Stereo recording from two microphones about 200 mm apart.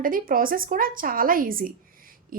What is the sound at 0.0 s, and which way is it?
A woman's voice, 45° right (ahead or behind).